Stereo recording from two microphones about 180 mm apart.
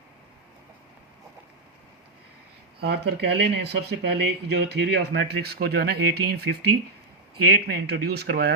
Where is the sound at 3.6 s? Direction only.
70° right (ahead or behind).